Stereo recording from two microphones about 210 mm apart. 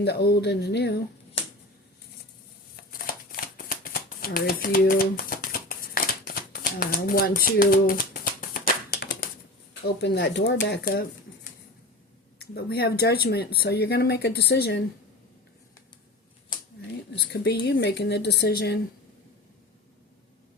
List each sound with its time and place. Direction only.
0.0 s speech: 50° left (ahead or behind)
2.9 s shuffling cards: 45° left (ahead or behind)
9.8 s speech: 55° left (ahead or behind)
12.4 s speech: 50° left (ahead or behind)
17.3 s speech: 50° left (ahead or behind)